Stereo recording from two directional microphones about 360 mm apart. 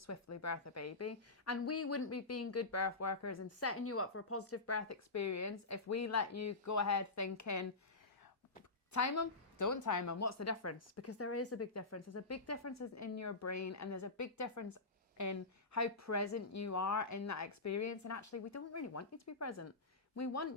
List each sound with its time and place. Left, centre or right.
0.0 s a woman's voice: left
8.9 s a woman's voice: left